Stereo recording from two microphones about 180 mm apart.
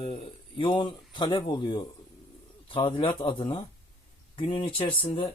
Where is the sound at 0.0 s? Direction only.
30° left (ahead or behind).